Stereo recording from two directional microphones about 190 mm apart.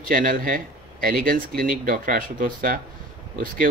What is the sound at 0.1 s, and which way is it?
Speech, 45° right (ahead or behind).